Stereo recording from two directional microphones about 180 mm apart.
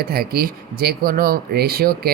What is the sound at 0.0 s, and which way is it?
Speech, 60° right (ahead or behind).